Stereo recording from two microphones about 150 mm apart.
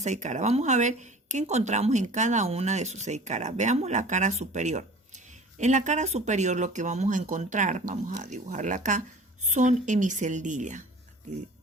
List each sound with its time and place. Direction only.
0.0 s a woman's voice: 50° right (ahead or behind)